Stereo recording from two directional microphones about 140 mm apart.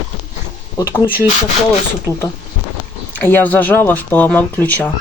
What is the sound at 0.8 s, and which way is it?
Speech, 20° left (ahead or behind).